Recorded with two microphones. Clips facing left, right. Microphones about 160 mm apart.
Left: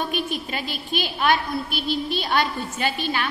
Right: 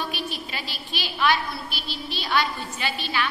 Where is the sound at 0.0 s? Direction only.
50° left (ahead or behind).